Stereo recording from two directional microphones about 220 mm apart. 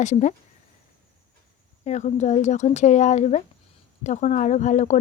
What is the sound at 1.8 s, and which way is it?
A woman's voice, 30° left (ahead or behind).